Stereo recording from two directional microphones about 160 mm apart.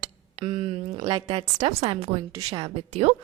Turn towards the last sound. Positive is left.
turn(degrees=-35)  # may be behind; listen again after turning